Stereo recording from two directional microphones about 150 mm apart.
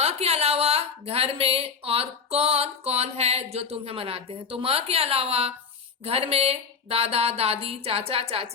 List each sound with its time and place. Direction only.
0.0 s speech: 45° right (ahead or behind)